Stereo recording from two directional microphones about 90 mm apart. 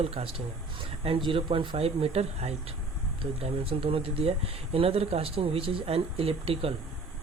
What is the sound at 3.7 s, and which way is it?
Speech, 90° right.